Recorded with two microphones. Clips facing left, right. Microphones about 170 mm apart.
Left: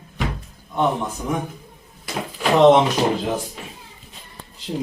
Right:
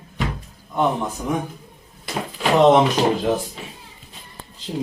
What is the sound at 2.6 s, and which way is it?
Speech, 20° left (ahead or behind).